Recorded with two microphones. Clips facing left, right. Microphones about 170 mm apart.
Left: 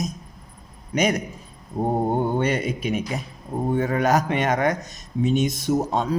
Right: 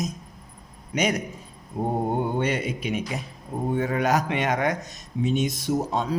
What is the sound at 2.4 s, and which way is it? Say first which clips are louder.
Speech: left 2 dB; 45° left (ahead or behind).